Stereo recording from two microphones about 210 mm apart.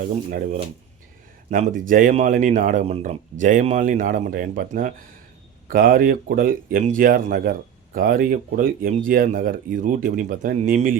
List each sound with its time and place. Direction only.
0.0 s speech: 40° right (ahead or behind)